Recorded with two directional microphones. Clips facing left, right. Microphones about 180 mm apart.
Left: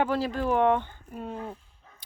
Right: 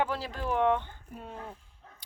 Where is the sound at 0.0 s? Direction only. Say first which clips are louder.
Left 6 dB; 50° left (ahead or behind).